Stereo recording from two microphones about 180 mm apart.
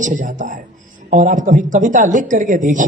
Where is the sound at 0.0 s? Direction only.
45° right (ahead or behind).